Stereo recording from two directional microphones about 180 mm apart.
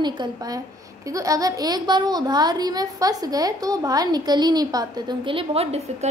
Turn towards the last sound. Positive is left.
turn(degrees=-35)  # may be behind; listen again after turning